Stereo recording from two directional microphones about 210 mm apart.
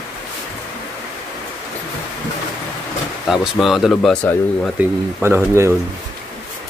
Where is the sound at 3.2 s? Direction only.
Centre (ahead or behind).